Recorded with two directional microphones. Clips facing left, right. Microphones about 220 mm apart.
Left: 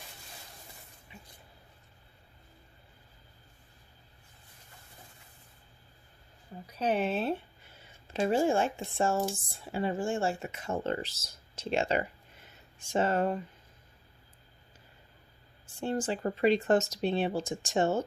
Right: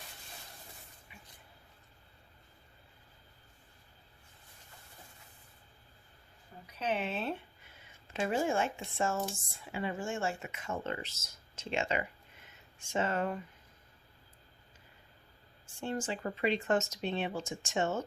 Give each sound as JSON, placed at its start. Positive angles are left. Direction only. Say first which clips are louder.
{"t": 1.1, "sound": "a sound", "louder": "left 7 dB", "side_deg": 30}
{"t": 6.7, "sound": "speech", "louder": "left 6 dB", "side_deg": 40}
{"t": 15.6, "sound": "speech", "louder": "left 5 dB", "side_deg": 35}